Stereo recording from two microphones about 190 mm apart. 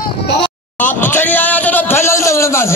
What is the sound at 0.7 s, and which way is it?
A man's voice, 10° left (ahead or behind).